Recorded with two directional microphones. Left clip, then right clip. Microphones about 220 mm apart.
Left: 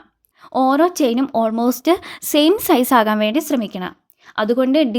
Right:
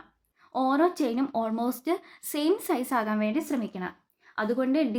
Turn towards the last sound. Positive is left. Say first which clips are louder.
# left 11 dB
turn(degrees=45)  # may be behind; listen again after turning